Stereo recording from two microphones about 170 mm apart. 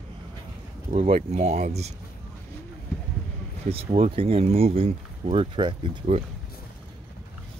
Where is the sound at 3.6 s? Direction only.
35° right (ahead or behind).